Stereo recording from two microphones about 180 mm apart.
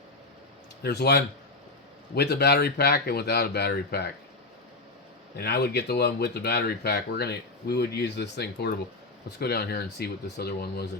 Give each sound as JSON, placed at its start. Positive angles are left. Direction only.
{"t": 0.8, "sound": "speech", "side_deg": 65}
{"t": 5.4, "sound": "speech", "side_deg": 65}